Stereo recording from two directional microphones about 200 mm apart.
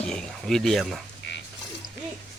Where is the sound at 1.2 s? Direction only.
60° left (ahead or behind).